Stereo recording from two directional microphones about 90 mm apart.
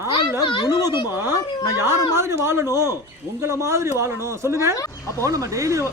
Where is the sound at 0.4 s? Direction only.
60° left (ahead or behind).